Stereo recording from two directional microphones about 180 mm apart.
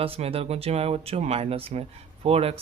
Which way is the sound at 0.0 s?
30° right (ahead or behind).